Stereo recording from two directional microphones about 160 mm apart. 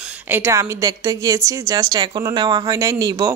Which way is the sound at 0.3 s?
15° right (ahead or behind).